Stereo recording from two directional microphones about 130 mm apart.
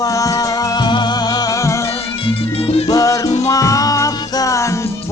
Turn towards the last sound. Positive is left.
turn(degrees=25)  # may be behind; listen again after turning